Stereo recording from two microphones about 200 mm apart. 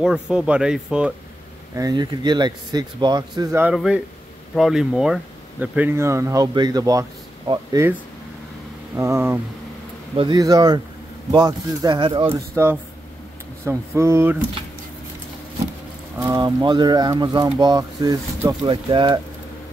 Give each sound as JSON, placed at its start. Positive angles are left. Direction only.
{"t": 0.0, "sound": "speech", "side_deg": -5}
{"t": 1.8, "sound": "speech", "side_deg": -20}
{"t": 3.6, "sound": "speech", "side_deg": -5}
{"t": 8.9, "sound": "speech", "side_deg": -15}
{"t": 12.3, "sound": "speech", "side_deg": -10}
{"t": 16.3, "sound": "speech", "side_deg": -20}